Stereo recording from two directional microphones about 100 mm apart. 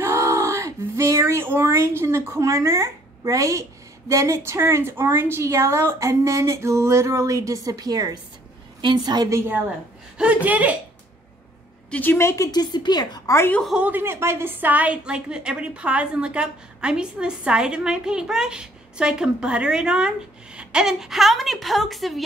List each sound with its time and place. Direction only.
0.0 s a sound: 25° right (ahead or behind)
4.1 s a woman's voice: 30° right (ahead or behind)
10.1 s a woman's voice: 15° right (ahead or behind)
11.9 s a woman's voice: 20° left (ahead or behind)
12.4 s a woman's voice: 45° left (ahead or behind)
13.7 s a woman's voice: 15° right (ahead or behind); by 22.2 s centre (ahead or behind)